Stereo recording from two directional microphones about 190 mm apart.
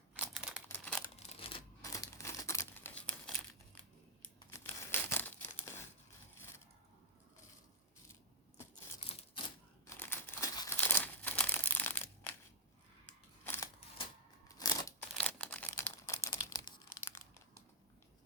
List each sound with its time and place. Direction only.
0.1 s a sound: 5° right (ahead or behind)
0.7 s crumpling: 5° left (ahead or behind)
1.4 s a sound: 30° left (ahead or behind)
1.8 s crumpling: 15° left (ahead or behind)
4.5 s crumpling: 15° left (ahead or behind)
9.4 s typewriter: 25° left (ahead or behind)
9.8 s crumpling: 15° left (ahead or behind)
13.4 s a sound: 10° left (ahead or behind)
14.4 s scissors: 15° left (ahead or behind)
15.1 s crumpling: 5° left (ahead or behind)